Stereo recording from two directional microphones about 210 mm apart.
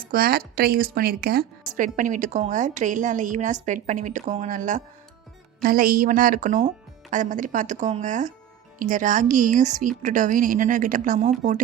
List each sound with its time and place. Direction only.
0.0 s a woman's voice: 45° right (ahead or behind)